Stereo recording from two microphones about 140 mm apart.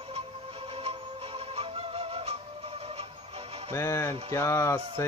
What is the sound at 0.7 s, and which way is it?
Music, 45° right (ahead or behind).